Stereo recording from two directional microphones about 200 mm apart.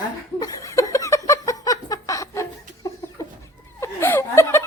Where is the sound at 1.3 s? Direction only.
15° left (ahead or behind).